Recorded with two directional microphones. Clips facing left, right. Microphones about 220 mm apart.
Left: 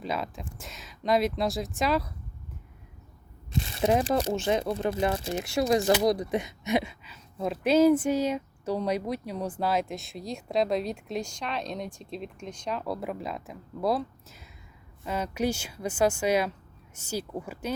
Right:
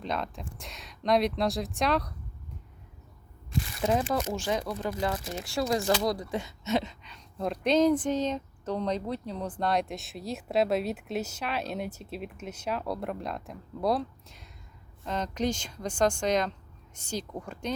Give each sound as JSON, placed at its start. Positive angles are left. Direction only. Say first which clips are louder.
{"t": 0.0, "sound": "speech", "louder": "left 1 dB", "side_deg": 5}
{"t": 3.5, "sound": "speech", "louder": "left 3 dB", "side_deg": 25}